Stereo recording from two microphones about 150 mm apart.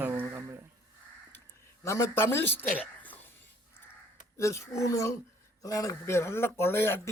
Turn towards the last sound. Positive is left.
turn(degrees=15)  # may be behind; listen again after turning